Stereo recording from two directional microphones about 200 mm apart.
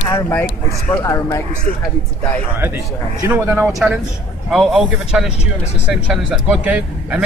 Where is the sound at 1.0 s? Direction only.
15° left (ahead or behind).